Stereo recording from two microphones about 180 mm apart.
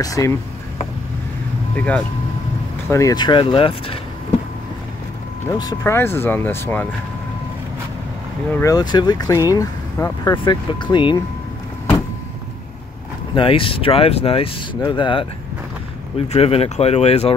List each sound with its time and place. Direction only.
0.0 s speech: 20° left (ahead or behind)
1.8 s speech: 10° left (ahead or behind); by 4.0 s 30° left (ahead or behind)
5.5 s speech: 20° left (ahead or behind)
8.5 s speech: 20° left (ahead or behind)
10.4 s speech: 25° left (ahead or behind)
13.3 s speech: 30° left (ahead or behind)
16.3 s speech: 35° left (ahead or behind)